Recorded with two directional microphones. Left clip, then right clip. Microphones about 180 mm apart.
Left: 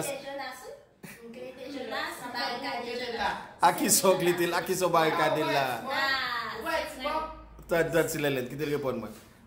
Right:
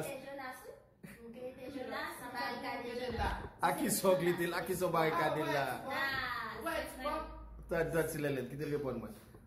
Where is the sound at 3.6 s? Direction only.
25° left (ahead or behind).